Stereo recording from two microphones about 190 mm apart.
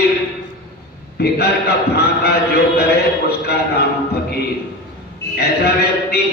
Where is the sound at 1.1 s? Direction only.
60° left (ahead or behind).